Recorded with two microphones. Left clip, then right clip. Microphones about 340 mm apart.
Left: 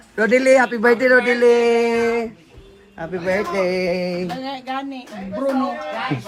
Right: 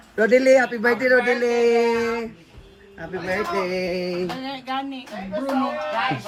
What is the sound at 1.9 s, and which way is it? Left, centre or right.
Speech, centre.